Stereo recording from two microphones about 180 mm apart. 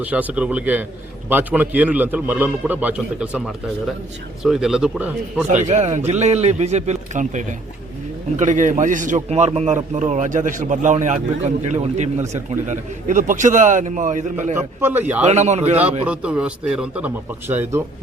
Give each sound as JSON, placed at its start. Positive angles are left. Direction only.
{"t": 0.0, "sound": "a man's voice", "side_deg": -10}
{"t": 5.5, "sound": "a man's voice", "side_deg": -40}
{"t": 14.8, "sound": "a man's voice", "side_deg": -10}
{"t": 15.2, "sound": "speech", "side_deg": -40}
{"t": 16.0, "sound": "a man's voice", "side_deg": -5}